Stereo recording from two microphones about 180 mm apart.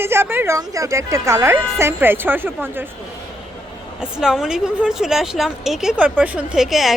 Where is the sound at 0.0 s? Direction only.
15° right (ahead or behind).